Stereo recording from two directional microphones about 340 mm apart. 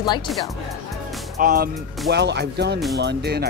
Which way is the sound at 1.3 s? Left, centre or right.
Right.